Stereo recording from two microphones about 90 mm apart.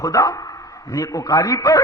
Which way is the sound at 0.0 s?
40° left (ahead or behind).